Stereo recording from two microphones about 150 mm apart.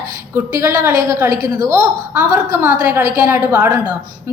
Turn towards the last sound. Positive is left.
turn(degrees=-10)  # may be behind; listen again after turning